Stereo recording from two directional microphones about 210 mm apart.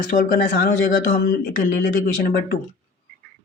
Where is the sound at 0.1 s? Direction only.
40° left (ahead or behind).